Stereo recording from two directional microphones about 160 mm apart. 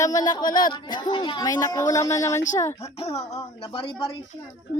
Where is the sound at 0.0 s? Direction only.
25° left (ahead or behind).